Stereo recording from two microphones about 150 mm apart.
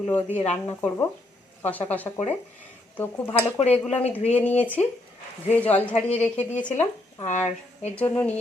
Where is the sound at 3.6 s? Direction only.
45° left (ahead or behind).